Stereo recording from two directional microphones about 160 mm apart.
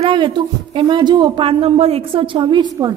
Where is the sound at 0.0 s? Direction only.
30° right (ahead or behind).